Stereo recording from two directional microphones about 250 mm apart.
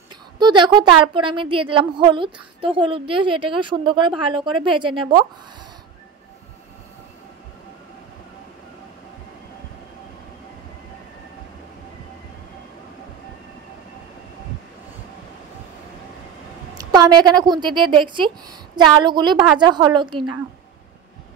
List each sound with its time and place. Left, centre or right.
0.4 s a woman's voice: centre
16.7 s a woman's voice: centre